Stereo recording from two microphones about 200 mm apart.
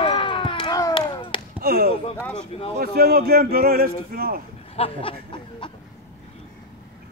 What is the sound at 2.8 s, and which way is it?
A man's voice, 50° right (ahead or behind).